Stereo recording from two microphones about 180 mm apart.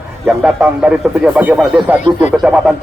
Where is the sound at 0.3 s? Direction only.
5° right (ahead or behind).